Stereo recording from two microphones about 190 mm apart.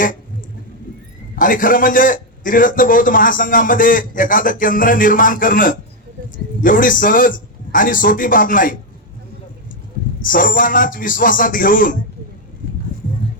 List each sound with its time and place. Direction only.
1.4 s a man's voice: 45° left (ahead or behind)
10.2 s a man's voice: 45° left (ahead or behind)